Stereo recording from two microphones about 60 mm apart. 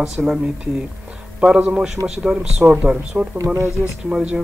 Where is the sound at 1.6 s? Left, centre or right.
Centre.